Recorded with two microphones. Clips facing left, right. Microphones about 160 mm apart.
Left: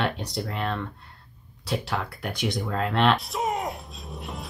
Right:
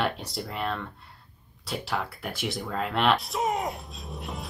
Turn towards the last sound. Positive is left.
turn(degrees=0)  # may be behind; listen again after turning